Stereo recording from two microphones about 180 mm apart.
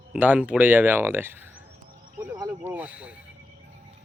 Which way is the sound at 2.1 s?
5° right (ahead or behind).